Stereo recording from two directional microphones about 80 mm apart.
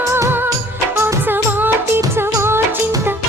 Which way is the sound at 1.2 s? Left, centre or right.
Right.